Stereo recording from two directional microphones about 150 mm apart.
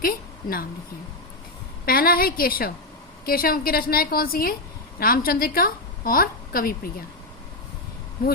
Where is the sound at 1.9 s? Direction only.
80° left.